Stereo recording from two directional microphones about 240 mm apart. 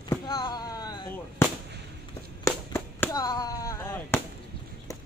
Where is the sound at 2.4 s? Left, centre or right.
Centre.